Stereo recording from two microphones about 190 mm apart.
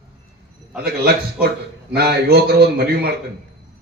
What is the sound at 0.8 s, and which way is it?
A man's voice, 55° right (ahead or behind).